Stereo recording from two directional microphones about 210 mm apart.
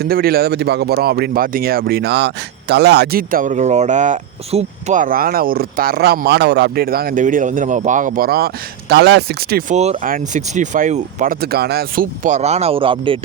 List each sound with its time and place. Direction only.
0.0 s speech: 45° right (ahead or behind); by 13.1 s 25° right (ahead or behind)